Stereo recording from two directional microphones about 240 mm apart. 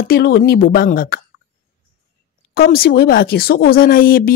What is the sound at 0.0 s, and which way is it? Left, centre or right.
A woman's voice, left.